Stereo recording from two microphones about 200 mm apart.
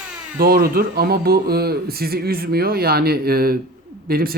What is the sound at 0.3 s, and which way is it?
Speech, 50° right (ahead or behind).